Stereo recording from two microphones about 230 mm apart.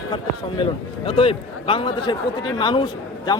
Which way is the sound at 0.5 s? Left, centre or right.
Left.